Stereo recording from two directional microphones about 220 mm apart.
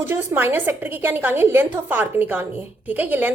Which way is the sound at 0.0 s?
10° right (ahead or behind).